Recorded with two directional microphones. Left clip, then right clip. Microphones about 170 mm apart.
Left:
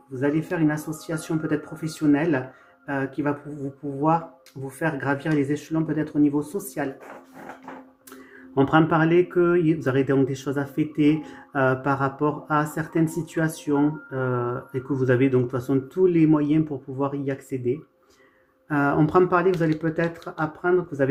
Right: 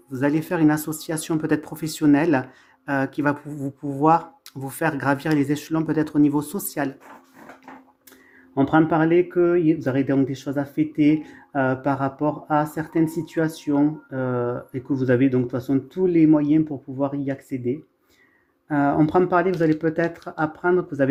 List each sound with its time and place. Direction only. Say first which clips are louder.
0.1 s speech: right 2 dB; 65° right (ahead or behind)
8.5 s speech: right 1 dB; 20° right (ahead or behind)
18.7 s speech: right 1 dB; 30° right (ahead or behind)